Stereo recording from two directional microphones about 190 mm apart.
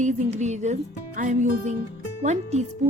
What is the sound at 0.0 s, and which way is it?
Speech, 40° right (ahead or behind).